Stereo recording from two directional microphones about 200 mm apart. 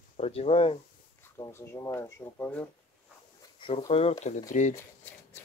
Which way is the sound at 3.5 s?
30° left (ahead or behind).